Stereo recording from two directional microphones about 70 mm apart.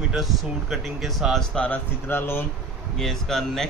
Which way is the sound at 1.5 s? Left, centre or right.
Centre.